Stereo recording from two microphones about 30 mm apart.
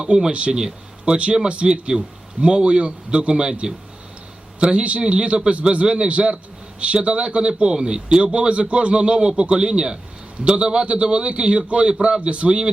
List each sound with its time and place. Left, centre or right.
0.3 s a man's voice: right
8.2 s a man's voice: right